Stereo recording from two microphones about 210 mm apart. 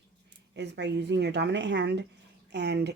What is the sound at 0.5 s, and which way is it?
Speech, 55° right (ahead or behind).